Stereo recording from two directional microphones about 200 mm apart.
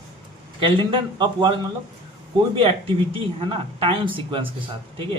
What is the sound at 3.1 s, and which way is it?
Speech, 25° right (ahead or behind).